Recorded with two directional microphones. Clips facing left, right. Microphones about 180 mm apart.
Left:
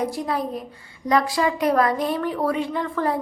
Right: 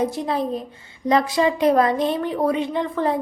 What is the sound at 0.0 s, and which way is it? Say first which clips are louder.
Child singing: right 2 dB; 20° right (ahead or behind).